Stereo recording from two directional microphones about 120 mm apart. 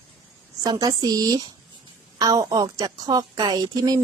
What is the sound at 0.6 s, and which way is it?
A woman's voice, 35° right (ahead or behind).